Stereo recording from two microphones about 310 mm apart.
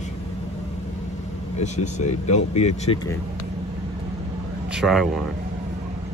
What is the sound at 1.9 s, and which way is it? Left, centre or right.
Speech, left.